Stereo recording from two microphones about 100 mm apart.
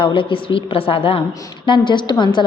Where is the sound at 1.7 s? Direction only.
50° left (ahead or behind).